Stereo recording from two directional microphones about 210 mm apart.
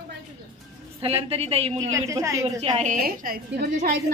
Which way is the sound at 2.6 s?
30° right (ahead or behind).